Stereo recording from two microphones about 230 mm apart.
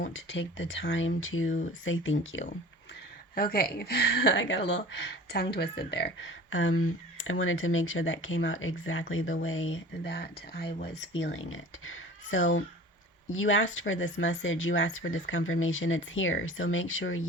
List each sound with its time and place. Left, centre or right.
0.1 s speech: left
3.3 s speech: left